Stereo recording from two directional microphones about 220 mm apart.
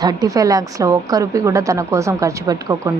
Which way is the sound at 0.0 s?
15° right (ahead or behind).